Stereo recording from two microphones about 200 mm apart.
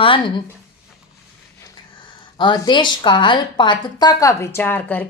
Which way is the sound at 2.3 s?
20° left (ahead or behind).